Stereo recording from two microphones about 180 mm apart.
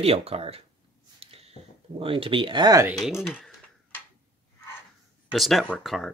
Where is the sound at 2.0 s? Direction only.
30° right (ahead or behind).